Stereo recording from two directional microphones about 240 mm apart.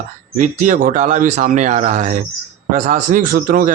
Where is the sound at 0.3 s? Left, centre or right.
Right.